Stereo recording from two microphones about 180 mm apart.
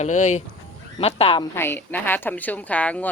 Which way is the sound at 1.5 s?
10° left (ahead or behind).